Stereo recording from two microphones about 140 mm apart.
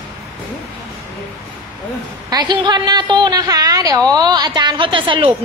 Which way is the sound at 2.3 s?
30° right (ahead or behind).